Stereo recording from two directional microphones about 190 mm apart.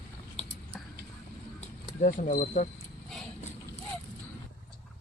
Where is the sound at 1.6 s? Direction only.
45° left (ahead or behind).